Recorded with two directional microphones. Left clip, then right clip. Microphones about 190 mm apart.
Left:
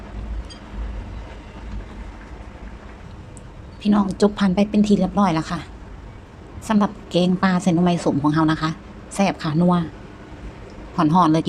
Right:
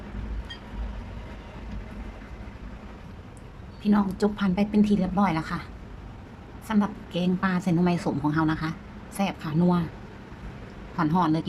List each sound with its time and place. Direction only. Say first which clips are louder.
3.8 s a woman's voice: left 6 dB; 15° left (ahead or behind)
6.7 s a woman's voice: left 7 dB; 20° left (ahead or behind)
10.9 s a woman's voice: left 8 dB; 15° left (ahead or behind)